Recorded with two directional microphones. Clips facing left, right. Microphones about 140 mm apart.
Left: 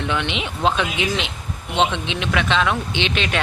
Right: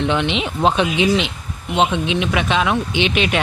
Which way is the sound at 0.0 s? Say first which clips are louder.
Right 5 dB; 25° right (ahead or behind).